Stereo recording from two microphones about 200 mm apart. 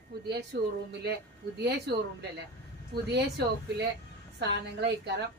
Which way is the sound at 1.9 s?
60° right (ahead or behind).